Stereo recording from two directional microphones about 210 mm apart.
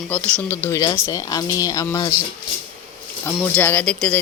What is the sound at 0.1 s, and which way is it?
Speech, 5° left (ahead or behind).